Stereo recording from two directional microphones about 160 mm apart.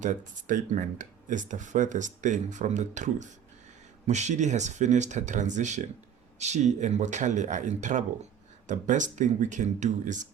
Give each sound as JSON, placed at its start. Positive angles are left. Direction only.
{"t": 0.0, "sound": "speech", "side_deg": -55}